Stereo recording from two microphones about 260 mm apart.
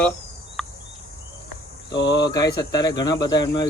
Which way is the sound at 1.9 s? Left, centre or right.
Left.